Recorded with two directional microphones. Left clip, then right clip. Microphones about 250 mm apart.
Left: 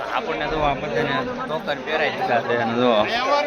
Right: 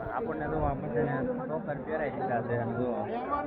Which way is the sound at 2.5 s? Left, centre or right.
Left.